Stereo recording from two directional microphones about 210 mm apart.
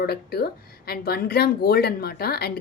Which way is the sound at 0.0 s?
45° left (ahead or behind).